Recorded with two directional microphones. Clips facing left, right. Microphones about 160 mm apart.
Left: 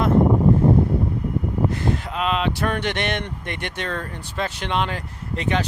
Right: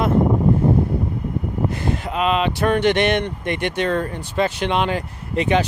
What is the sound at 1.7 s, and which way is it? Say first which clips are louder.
Speech: right 1 dB; 5° right (ahead or behind).